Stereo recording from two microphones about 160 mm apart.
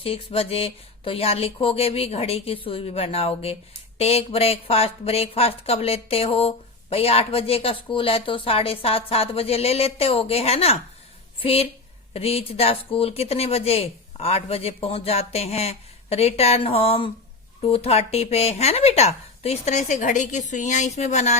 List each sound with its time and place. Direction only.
0.0 s speech: 35° left (ahead or behind)